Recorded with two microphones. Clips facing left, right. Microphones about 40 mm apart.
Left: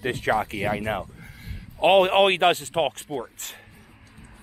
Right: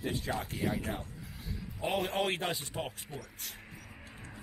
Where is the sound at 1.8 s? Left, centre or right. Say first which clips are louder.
Left 15 dB; left.